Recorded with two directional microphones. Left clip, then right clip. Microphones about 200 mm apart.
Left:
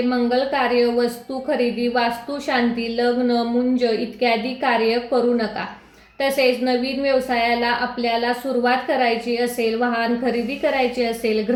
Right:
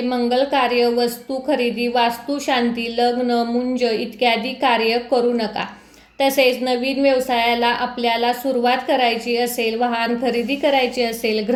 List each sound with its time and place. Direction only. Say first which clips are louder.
0.3 s a woman's voice: right 4 dB; 30° right (ahead or behind)
6.1 s a woman's voice: right 2 dB; 30° right (ahead or behind)